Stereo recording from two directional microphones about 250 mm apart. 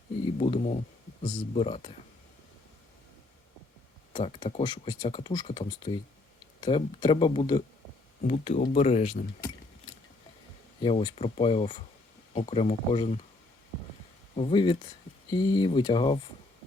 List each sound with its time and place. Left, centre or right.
0.3 s speech: left
4.1 s speech: left
8.2 s speech: left
10.8 s speech: left
14.3 s speech: left